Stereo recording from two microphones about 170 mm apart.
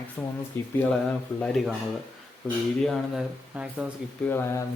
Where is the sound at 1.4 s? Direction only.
Centre (ahead or behind).